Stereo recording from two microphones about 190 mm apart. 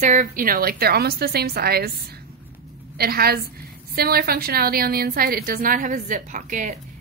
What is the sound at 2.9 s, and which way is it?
Speech, 55° right (ahead or behind).